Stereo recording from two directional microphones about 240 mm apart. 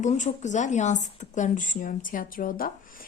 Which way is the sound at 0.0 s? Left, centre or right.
Left.